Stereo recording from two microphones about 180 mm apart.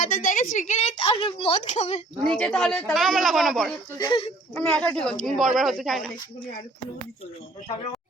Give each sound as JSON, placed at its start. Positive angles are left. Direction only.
{"t": 0.0, "sound": "a sound", "side_deg": 50}
{"t": 0.5, "sound": "a woman's voice", "side_deg": 45}
{"t": 0.9, "sound": "a woman's voice", "side_deg": 30}
{"t": 2.3, "sound": "speech", "side_deg": 10}
{"t": 3.9, "sound": "speech", "side_deg": 25}
{"t": 4.5, "sound": "speech", "side_deg": 10}